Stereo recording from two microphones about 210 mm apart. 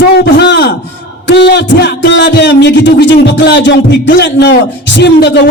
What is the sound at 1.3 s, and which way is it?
Speech, 60° left (ahead or behind).